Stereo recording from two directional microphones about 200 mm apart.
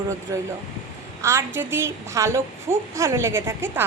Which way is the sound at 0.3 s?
15° right (ahead or behind).